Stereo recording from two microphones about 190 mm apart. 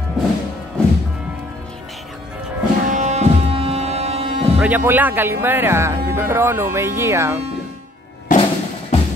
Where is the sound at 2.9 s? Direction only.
40° right (ahead or behind).